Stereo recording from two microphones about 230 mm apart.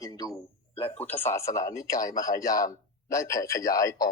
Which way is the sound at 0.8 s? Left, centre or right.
Left.